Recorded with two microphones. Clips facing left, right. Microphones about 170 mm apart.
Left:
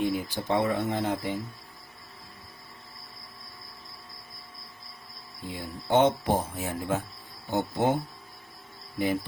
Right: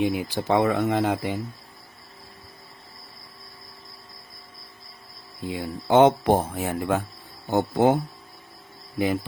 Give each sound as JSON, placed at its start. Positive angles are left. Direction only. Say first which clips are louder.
{"t": 0.0, "sound": "speech", "louder": "right 4 dB", "side_deg": -90}
{"t": 5.5, "sound": "speech", "louder": "right 5 dB", "side_deg": -90}
{"t": 7.5, "sound": "speech", "louder": "right 6 dB", "side_deg": -90}